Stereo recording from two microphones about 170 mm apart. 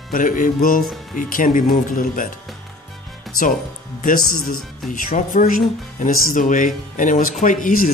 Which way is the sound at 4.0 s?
55° left (ahead or behind).